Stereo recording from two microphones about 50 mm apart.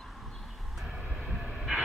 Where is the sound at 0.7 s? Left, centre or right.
Centre.